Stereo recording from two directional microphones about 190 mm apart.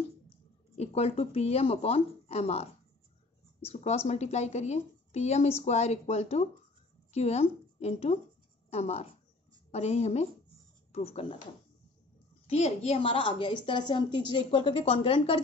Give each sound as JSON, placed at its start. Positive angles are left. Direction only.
{"t": 0.7, "sound": "a woman's voice", "side_deg": 30}
{"t": 12.4, "sound": "a woman's voice", "side_deg": 35}